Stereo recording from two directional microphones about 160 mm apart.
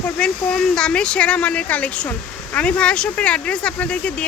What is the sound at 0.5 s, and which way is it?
Speech, 5° left (ahead or behind).